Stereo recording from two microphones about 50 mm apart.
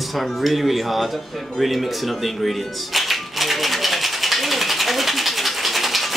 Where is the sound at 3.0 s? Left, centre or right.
Centre.